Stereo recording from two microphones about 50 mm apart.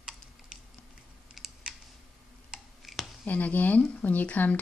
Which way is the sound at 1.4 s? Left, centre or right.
Centre.